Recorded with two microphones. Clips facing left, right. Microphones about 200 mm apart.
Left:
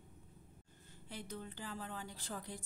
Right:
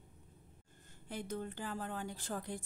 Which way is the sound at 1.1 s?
50° right (ahead or behind).